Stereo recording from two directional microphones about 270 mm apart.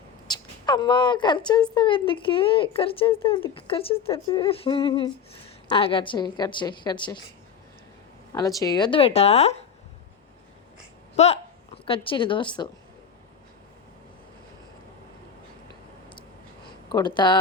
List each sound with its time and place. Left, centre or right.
0.3 s a woman's voice: centre
8.3 s speech: centre
11.2 s a woman's voice: left
16.9 s a woman's voice: centre